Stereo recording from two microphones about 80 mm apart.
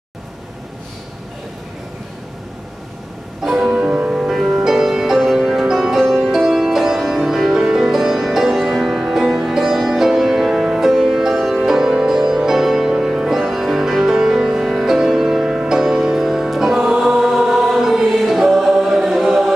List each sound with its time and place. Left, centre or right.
3.4 s music: centre